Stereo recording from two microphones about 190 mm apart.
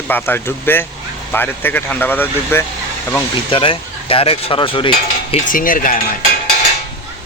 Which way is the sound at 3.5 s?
30° left (ahead or behind).